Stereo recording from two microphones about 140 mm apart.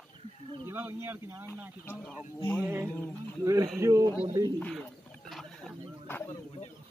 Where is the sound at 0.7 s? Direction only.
15° right (ahead or behind).